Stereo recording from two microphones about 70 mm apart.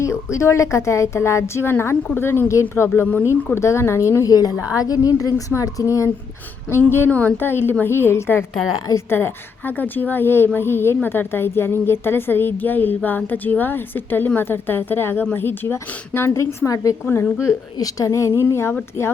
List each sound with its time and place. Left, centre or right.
0.0 s a woman's voice: left
4.3 s speech: left
7.1 s a woman's voice: left